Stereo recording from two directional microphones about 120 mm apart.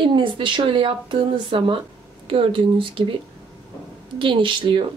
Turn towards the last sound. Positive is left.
turn(degrees=-45)  # may be behind; listen again after turning